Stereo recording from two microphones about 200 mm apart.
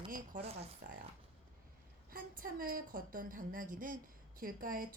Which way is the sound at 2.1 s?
45° right (ahead or behind).